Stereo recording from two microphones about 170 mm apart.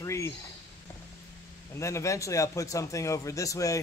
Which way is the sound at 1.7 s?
15° left (ahead or behind).